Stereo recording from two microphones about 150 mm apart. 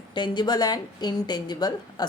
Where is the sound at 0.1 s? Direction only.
30° left (ahead or behind).